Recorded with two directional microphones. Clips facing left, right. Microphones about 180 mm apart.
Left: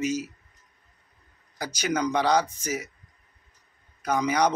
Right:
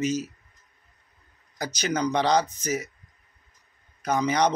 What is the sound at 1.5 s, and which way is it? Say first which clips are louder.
Speech: even; 10° left (ahead or behind).